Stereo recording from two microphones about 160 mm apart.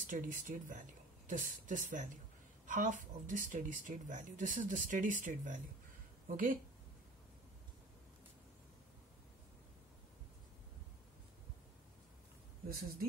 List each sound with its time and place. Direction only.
0.0 s speech: 50° right (ahead or behind)